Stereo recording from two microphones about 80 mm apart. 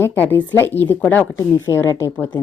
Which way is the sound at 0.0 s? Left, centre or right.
Left.